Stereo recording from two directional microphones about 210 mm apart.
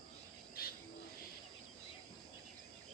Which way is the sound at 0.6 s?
45° left (ahead or behind).